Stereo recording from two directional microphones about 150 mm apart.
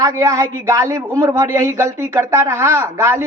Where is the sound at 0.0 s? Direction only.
20° right (ahead or behind).